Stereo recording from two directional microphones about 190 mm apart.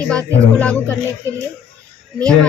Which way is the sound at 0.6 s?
5° left (ahead or behind).